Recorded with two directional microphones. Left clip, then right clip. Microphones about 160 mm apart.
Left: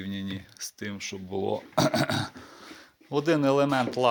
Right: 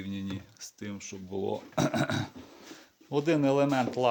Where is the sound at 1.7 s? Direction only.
Centre (ahead or behind).